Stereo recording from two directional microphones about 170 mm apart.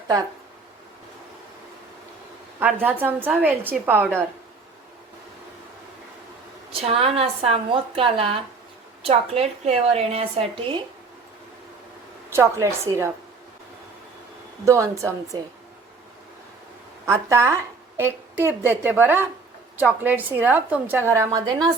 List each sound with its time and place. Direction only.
2.6 s a woman's voice: 10° right (ahead or behind)
6.8 s a woman's voice: 35° right (ahead or behind)
12.3 s a woman's voice: 15° right (ahead or behind)
14.6 s a woman's voice: 20° right (ahead or behind)
17.1 s a woman's voice: 15° right (ahead or behind)